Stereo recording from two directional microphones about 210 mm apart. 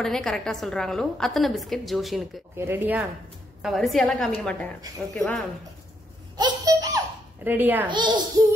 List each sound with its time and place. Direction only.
0.0 s a woman's voice: 5° left (ahead or behind)
2.5 s a woman's voice: 10° right (ahead or behind)
6.3 s a sound: 20° right (ahead or behind)
7.4 s speech: 10° right (ahead or behind)
7.9 s a child's voice: 20° right (ahead or behind)